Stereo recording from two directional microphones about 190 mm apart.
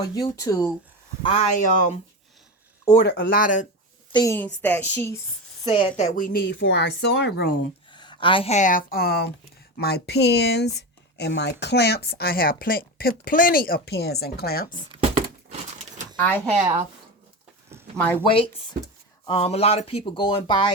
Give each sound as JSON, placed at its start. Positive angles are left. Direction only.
{"t": 0.0, "sound": "speech", "side_deg": 20}
{"t": 1.2, "sound": "speech", "side_deg": 35}
{"t": 3.0, "sound": "a woman's voice", "side_deg": 55}
{"t": 4.1, "sound": "a woman's voice", "side_deg": 15}
{"t": 5.6, "sound": "speech", "side_deg": 25}
{"t": 6.0, "sound": "speech", "side_deg": 45}
{"t": 7.9, "sound": "a woman's voice", "side_deg": 25}
{"t": 16.1, "sound": "speech", "side_deg": 10}
{"t": 17.9, "sound": "speech", "side_deg": 10}
{"t": 18.2, "sound": "speech", "side_deg": 25}